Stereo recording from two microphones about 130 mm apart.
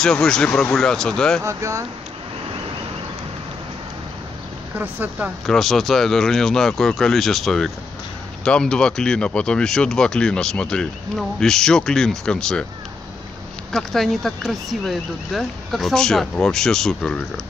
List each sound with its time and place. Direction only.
0.0 s speech: 5° left (ahead or behind)
1.4 s speech: 20° right (ahead or behind)
4.7 s speech: 15° right (ahead or behind)
5.5 s speech: centre (ahead or behind)
13.7 s speech: centre (ahead or behind)